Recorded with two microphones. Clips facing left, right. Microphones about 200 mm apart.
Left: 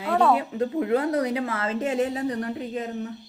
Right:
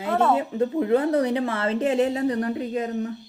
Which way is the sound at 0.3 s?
30° right (ahead or behind).